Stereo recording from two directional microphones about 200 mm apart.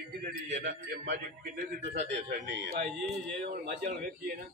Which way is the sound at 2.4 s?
60° right (ahead or behind).